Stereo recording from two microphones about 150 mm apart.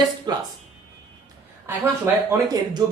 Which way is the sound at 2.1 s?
15° right (ahead or behind).